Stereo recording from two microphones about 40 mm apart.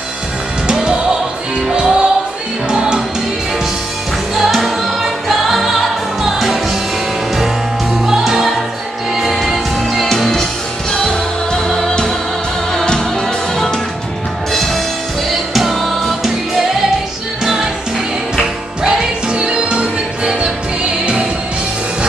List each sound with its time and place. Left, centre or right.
0.7 s music: right
4.4 s music: centre
8.2 s music: centre
14.5 s music: centre
18.9 s music: right